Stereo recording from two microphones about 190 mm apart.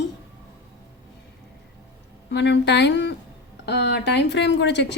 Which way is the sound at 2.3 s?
65° left (ahead or behind).